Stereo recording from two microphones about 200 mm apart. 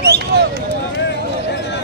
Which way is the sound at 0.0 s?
55° right (ahead or behind).